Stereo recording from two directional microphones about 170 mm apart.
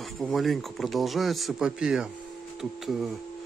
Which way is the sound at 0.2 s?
Centre (ahead or behind).